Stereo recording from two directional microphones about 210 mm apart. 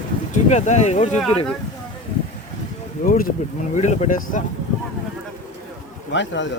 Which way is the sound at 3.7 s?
35° left (ahead or behind).